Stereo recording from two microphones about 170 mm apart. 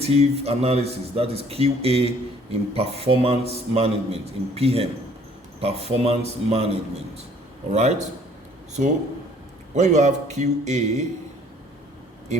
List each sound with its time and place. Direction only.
0.0 s a man's voice: 35° right (ahead or behind)
9.7 s a man's voice: 45° right (ahead or behind)